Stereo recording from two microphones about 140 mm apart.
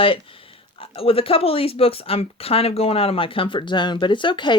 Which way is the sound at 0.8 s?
40° left (ahead or behind).